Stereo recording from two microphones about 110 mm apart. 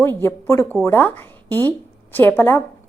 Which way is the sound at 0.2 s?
25° left (ahead or behind).